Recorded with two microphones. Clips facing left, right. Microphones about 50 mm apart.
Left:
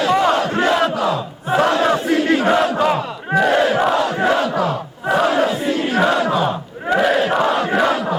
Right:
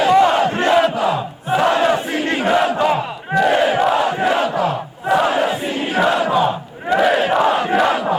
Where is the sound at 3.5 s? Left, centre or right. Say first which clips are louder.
Right 1 dB; centre.